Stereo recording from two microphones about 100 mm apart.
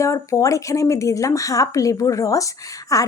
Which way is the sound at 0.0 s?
30° left (ahead or behind).